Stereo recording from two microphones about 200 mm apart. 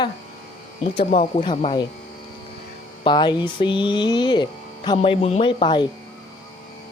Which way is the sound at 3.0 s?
20° left (ahead or behind).